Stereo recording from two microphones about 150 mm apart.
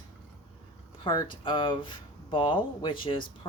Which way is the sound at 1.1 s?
30° left (ahead or behind).